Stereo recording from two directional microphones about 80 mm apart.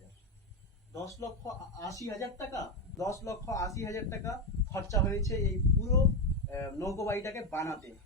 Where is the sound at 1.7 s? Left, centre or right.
Left.